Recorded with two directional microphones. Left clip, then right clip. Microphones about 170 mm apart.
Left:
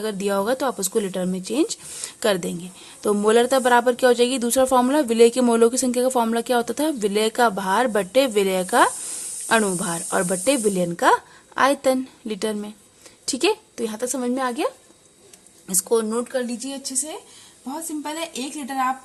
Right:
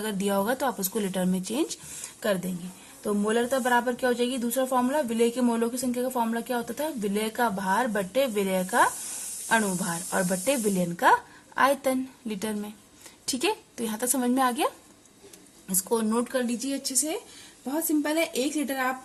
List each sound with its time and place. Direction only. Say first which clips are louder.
0.0 s speech: left 5 dB; 25° left (ahead or behind)
2.2 s speech: left 6 dB; 45° left (ahead or behind); by 14.7 s 20° left (ahead or behind)
15.7 s speech: left 5 dB; 30° left (ahead or behind)
16.3 s speech: left 2 dB; 5° left (ahead or behind)